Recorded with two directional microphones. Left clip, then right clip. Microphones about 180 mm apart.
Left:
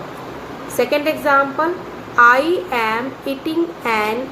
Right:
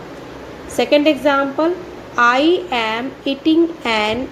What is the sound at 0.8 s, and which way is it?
A woman's voice, 35° right (ahead or behind).